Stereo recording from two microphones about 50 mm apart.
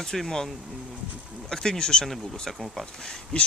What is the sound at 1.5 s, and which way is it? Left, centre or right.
Speech, centre.